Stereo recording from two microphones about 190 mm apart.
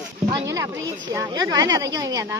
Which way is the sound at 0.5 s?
15° right (ahead or behind).